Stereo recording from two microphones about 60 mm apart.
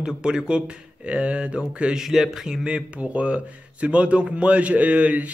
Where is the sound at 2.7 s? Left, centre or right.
Centre.